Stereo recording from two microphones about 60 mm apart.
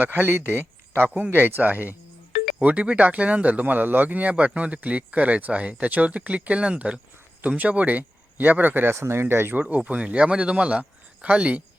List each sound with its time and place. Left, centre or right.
0.0 s speech: right
9.0 s speech: right
9.6 s speech: right